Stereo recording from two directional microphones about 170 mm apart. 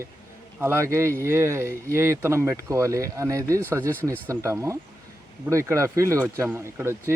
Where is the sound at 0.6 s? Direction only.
15° right (ahead or behind).